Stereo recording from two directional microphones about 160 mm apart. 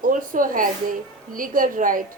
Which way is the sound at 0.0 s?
55° right (ahead or behind).